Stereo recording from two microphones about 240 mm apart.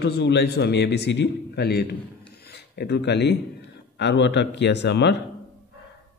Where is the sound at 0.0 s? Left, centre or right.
Left.